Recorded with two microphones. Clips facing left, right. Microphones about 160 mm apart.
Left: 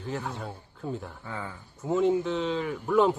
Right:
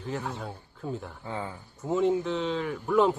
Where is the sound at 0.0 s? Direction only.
Centre (ahead or behind).